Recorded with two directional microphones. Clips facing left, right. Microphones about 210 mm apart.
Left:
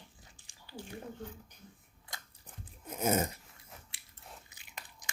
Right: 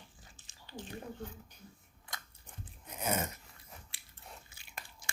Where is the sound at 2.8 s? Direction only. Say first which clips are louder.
Left 5 dB; 40° left (ahead or behind).